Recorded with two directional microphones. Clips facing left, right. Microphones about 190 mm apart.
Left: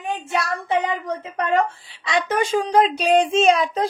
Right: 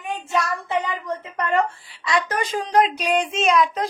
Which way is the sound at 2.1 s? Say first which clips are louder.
Left 3 dB; 25° left (ahead or behind).